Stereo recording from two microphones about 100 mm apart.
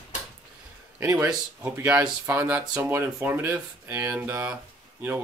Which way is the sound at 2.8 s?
25° right (ahead or behind).